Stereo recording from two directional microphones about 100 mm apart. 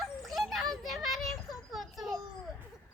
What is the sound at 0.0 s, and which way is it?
Children playing, centre (ahead or behind).